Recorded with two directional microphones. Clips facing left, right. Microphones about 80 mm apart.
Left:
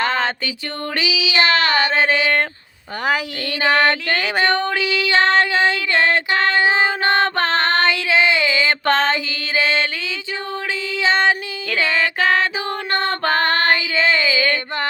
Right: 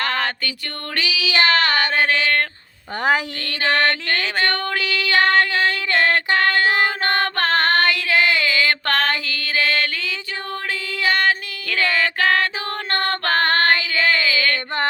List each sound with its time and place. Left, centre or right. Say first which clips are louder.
0.0 s music: left 3 dB; left
0.9 s child singing: left 1 dB; centre
1.7 s a sound: left 2 dB; left
3.0 s speech: right 1 dB; right
3.6 s female singing: left 3 dB; centre
10.9 s female singing: left 2 dB; centre
12.9 s music: left 1 dB; centre
13.7 s a sound: left 1 dB; centre